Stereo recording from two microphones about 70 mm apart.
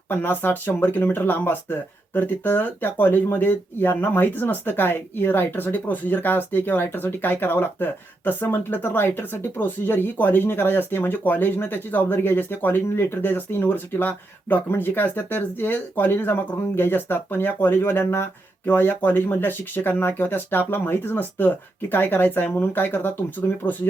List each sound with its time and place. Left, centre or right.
0.1 s speech: left